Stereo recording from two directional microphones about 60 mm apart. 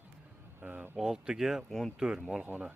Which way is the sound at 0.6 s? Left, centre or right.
Right.